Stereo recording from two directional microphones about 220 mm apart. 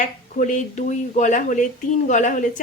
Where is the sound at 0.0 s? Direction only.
35° left (ahead or behind).